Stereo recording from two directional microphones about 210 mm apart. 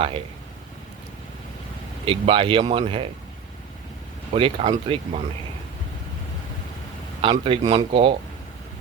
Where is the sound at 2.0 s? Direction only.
25° right (ahead or behind).